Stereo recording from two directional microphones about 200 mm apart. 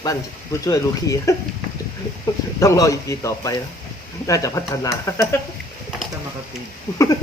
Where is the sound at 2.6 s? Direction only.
15° left (ahead or behind).